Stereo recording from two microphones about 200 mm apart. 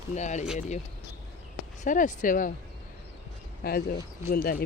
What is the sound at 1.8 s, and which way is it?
Speech, 40° left (ahead or behind).